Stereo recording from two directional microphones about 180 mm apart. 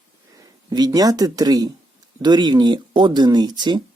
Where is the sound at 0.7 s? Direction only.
20° right (ahead or behind).